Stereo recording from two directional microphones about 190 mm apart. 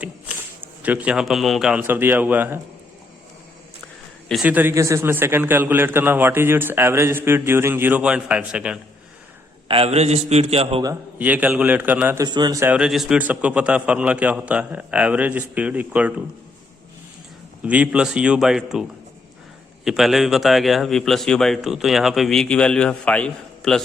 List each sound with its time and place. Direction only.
0.8 s a man's voice: 5° right (ahead or behind)
4.3 s a man's voice: 5° right (ahead or behind)
9.6 s a man's voice: 30° right (ahead or behind)
11.2 s a man's voice: 10° right (ahead or behind)
17.6 s a man's voice: 5° right (ahead or behind)